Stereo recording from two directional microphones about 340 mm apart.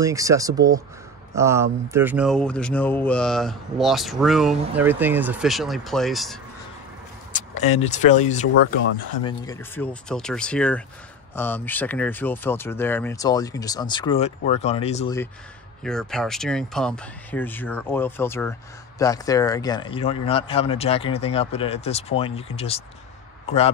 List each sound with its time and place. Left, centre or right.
0.0 s speech: centre
7.3 s speech: centre
15.8 s speech: centre